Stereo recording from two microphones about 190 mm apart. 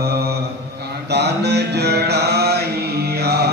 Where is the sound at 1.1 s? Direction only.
60° right (ahead or behind).